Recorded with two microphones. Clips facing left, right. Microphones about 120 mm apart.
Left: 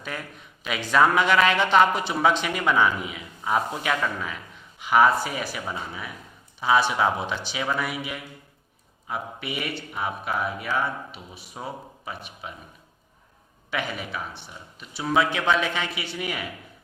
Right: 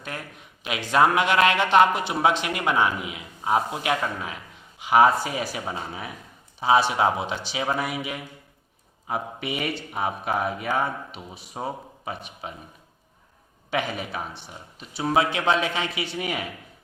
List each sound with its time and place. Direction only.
0.6 s a man's voice: 15° right (ahead or behind)
7.3 s speech: 35° right (ahead or behind)
9.0 s speech: 45° right (ahead or behind)
10.8 s speech: 30° right (ahead or behind)
13.7 s speech: 40° right (ahead or behind)
14.4 s a man's voice: 30° right (ahead or behind)